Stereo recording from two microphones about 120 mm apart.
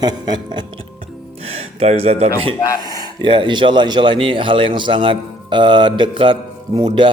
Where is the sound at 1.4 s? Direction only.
60° right (ahead or behind).